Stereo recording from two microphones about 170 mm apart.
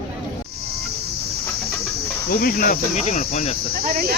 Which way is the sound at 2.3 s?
60° left (ahead or behind).